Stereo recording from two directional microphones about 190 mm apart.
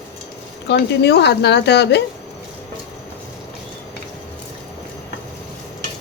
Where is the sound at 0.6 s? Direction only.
60° left (ahead or behind).